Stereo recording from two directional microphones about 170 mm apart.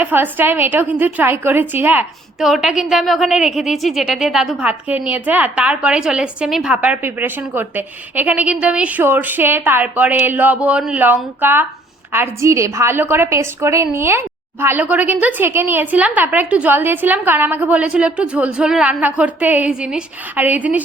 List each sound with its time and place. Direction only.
0.0 s a woman's voice: 10° right (ahead or behind)